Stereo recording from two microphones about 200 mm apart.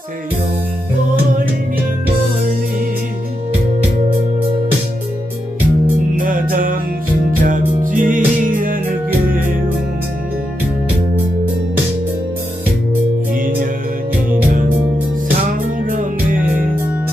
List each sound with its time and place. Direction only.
6.1 s music: 45° right (ahead or behind)
13.3 s music: 45° right (ahead or behind)
15.9 s music: 40° right (ahead or behind)